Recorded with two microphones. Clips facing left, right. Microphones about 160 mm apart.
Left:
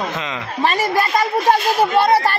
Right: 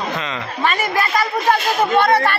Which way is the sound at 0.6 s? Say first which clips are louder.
Left 2 dB; 35° left (ahead or behind).